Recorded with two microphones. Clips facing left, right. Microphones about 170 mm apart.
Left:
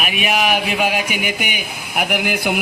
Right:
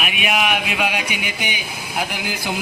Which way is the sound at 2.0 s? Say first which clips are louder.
Left 6 dB; 60° left (ahead or behind).